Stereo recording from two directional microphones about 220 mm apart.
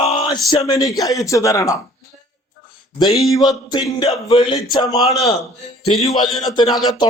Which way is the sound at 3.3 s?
15° left (ahead or behind).